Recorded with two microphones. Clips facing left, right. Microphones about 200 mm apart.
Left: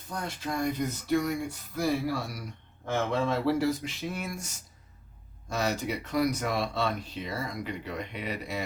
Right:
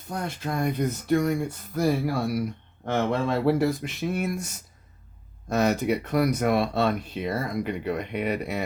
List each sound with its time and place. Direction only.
0.1 s speech: 55° right (ahead or behind)